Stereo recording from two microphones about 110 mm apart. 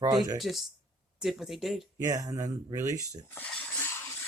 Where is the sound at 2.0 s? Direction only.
30° right (ahead or behind).